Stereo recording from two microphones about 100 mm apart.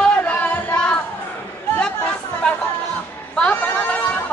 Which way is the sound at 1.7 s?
10° left (ahead or behind).